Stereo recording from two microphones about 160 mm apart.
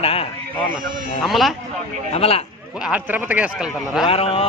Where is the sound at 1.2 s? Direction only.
Centre (ahead or behind).